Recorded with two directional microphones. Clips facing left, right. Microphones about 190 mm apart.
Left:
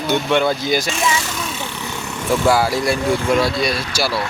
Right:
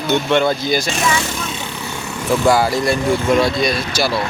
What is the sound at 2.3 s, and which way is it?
Speech, 5° left (ahead or behind).